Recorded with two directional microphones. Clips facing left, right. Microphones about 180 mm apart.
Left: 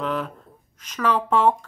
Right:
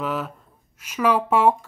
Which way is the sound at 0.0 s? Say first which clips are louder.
Even; 5° right (ahead or behind).